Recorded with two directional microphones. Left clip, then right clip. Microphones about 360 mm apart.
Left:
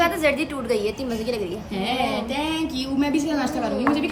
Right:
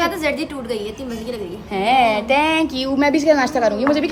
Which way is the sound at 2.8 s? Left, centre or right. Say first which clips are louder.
Right 6 dB; centre.